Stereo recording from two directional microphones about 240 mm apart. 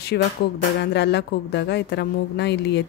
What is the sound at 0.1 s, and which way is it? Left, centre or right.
A woman's voice, left.